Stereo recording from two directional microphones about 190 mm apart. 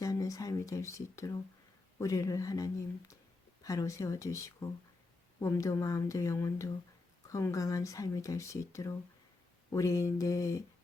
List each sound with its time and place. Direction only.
0.0 s speech: 20° left (ahead or behind)